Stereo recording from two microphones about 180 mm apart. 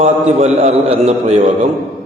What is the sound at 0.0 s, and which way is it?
A man's voice, 40° right (ahead or behind).